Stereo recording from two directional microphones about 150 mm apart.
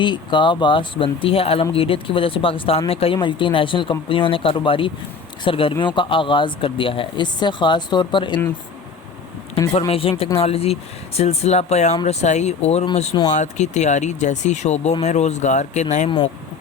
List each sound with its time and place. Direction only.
0.0 s speech: 30° left (ahead or behind)
9.9 s speech: 40° left (ahead or behind)
16.0 s speech: 30° left (ahead or behind)